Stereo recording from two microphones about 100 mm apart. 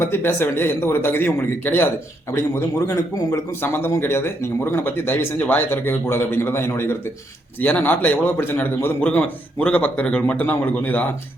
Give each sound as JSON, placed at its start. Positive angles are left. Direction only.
{"t": 0.0, "sound": "speech", "side_deg": 25}
{"t": 2.8, "sound": "a man's voice", "side_deg": 35}